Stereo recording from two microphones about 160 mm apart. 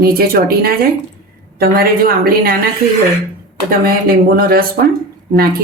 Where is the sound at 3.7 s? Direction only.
65° right (ahead or behind).